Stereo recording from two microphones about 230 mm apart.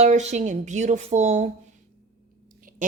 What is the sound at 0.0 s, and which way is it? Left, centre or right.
A woman's voice, right.